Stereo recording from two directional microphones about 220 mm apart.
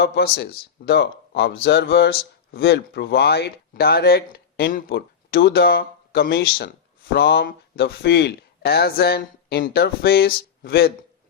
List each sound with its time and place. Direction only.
0.0 s speech: 45° left (ahead or behind)